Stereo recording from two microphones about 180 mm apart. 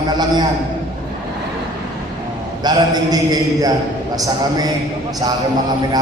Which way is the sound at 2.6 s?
20° right (ahead or behind).